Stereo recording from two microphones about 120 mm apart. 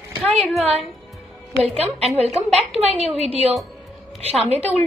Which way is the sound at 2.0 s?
60° right (ahead or behind).